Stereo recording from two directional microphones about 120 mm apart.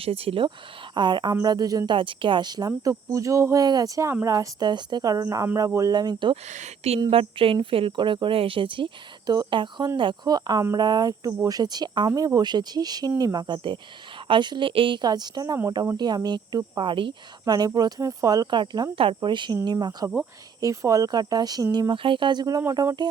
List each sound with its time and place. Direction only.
0.0 s speech: 50° right (ahead or behind); by 2.0 s 30° right (ahead or behind)
2.0 s speech: 45° right (ahead or behind)
6.3 s speech: 70° right (ahead or behind)
7.1 s speech: 50° right (ahead or behind)
17.4 s speech: 35° right (ahead or behind)
18.6 s speech: 40° right (ahead or behind)